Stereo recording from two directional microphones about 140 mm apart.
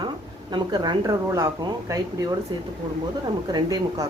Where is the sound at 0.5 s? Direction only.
30° right (ahead or behind).